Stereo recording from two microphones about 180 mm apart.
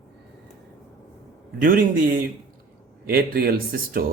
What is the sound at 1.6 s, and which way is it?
A man's voice, 50° right (ahead or behind).